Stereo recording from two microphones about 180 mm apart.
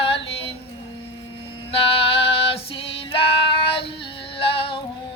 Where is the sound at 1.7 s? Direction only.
30° left (ahead or behind).